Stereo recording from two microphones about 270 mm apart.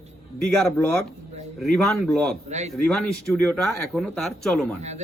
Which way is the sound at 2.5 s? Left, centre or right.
Right.